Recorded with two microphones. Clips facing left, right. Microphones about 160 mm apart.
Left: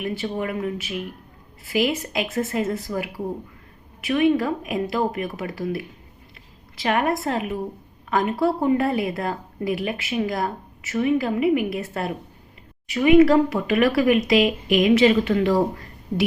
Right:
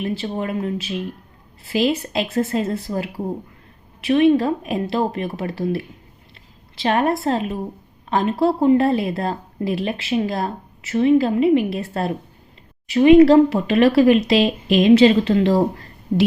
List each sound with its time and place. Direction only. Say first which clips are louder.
0.0 s a woman's voice: right 2 dB; 30° right (ahead or behind)